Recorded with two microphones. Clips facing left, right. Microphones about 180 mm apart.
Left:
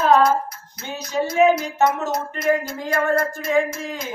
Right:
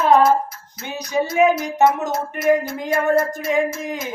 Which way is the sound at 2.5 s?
20° right (ahead or behind).